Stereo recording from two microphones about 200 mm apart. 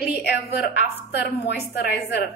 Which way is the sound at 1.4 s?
50° left (ahead or behind).